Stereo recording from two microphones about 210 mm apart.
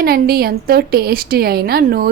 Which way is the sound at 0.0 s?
45° right (ahead or behind).